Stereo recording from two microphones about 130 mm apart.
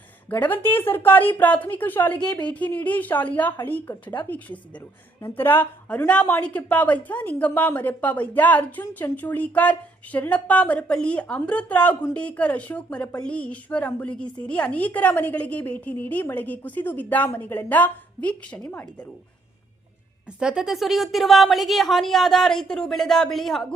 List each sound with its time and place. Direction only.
0.3 s a woman's voice: 15° left (ahead or behind)
2.2 s a woman's voice: 35° left (ahead or behind)
2.5 s a woman's voice: 10° left (ahead or behind)
20.4 s a woman's voice: 5° right (ahead or behind)